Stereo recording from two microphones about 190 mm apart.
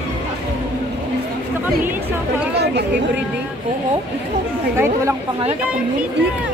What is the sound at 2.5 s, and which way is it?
Chatter, 60° right (ahead or behind).